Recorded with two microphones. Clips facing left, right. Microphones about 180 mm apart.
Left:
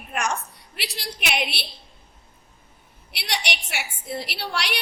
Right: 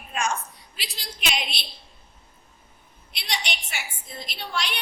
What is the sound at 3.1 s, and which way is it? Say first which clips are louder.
A woman's voice: left 3 dB; 70° left (ahead or behind).